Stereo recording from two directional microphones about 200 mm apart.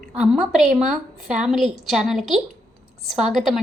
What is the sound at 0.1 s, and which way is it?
A woman's voice, 5° right (ahead or behind).